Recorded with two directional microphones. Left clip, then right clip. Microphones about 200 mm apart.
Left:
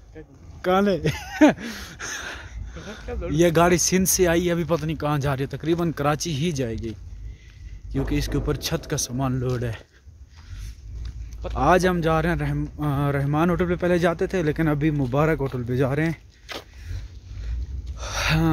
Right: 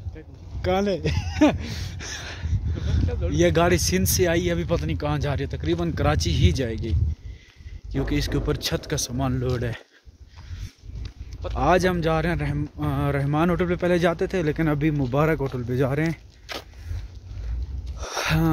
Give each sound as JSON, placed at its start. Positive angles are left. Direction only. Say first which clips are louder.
{"t": 0.6, "sound": "speech", "louder": "left 3 dB", "side_deg": 25}
{"t": 2.9, "sound": "speech", "louder": "right 1 dB", "side_deg": 45}
{"t": 3.3, "sound": "speech", "louder": "left 2 dB", "side_deg": 20}
{"t": 11.5, "sound": "speech", "louder": "left 1 dB", "side_deg": 15}
{"t": 16.5, "sound": "speech", "louder": "right 1 dB", "side_deg": 30}
{"t": 17.9, "sound": "a sound", "louder": "left 1 dB", "side_deg": 5}